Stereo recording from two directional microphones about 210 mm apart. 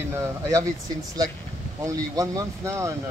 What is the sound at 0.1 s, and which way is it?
Speech, 15° right (ahead or behind).